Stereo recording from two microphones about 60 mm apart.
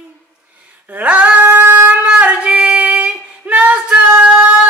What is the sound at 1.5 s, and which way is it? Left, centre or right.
Shofar, right.